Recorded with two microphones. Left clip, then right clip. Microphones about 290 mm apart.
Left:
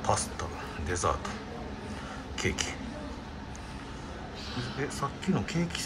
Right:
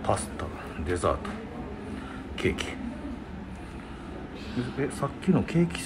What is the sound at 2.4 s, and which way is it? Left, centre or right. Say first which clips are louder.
Speech: right 4 dB; centre.